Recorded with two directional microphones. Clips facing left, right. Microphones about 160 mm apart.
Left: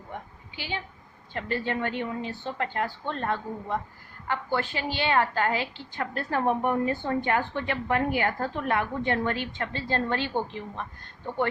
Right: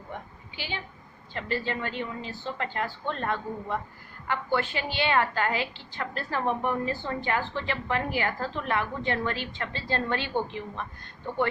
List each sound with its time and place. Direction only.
0.5 s a woman's voice: 50° left (ahead or behind)